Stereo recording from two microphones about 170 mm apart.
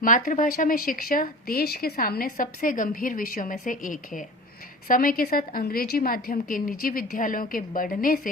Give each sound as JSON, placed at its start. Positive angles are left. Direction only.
{"t": 0.0, "sound": "speech", "side_deg": 50}